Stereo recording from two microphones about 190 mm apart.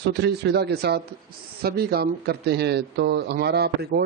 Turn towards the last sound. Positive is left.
turn(degrees=-60)  # may be behind; listen again after turning